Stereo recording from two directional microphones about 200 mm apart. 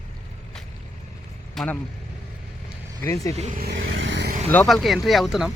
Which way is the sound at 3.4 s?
45° right (ahead or behind).